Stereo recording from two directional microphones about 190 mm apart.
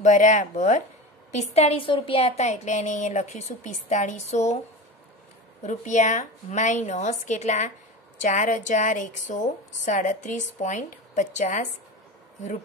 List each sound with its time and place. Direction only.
0.0 s a woman's voice: 40° left (ahead or behind)
5.6 s a woman's voice: 40° left (ahead or behind)